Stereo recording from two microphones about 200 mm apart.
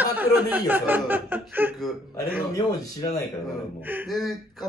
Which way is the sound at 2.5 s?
20° left (ahead or behind).